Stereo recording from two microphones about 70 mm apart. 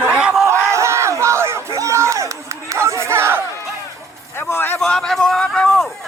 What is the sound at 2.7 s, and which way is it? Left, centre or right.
Chatter, right.